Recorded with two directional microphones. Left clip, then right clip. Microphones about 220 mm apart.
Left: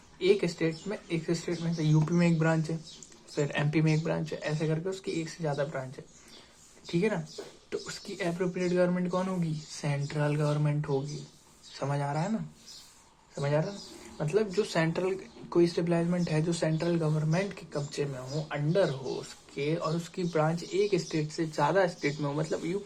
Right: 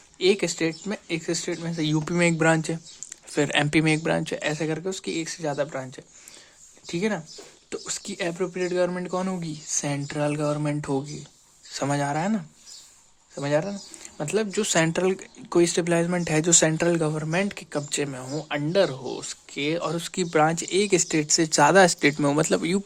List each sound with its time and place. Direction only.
0.2 s speech: 50° right (ahead or behind)
13.4 s speech: 55° right (ahead or behind)